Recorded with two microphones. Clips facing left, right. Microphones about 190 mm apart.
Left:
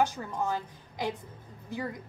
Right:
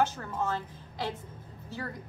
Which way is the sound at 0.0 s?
15° left (ahead or behind).